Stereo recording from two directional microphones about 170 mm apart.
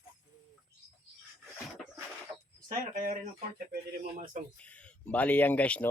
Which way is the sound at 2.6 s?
55° right (ahead or behind).